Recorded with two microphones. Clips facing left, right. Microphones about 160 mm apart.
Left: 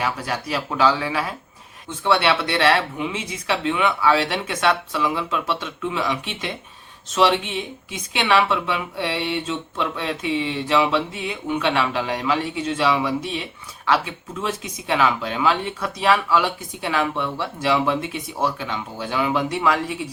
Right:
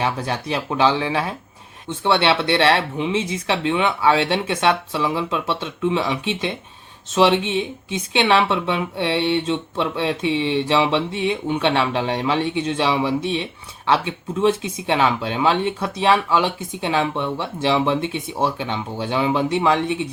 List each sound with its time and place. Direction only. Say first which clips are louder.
0.0 s speech: right 2 dB; 25° right (ahead or behind)